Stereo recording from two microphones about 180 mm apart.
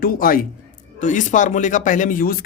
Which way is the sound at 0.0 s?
55° left (ahead or behind).